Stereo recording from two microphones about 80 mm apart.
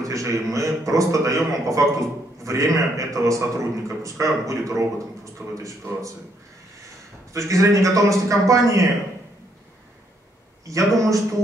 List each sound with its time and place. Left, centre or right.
0.1 s a man's voice: right
7.3 s a man's voice: right
10.7 s a man's voice: right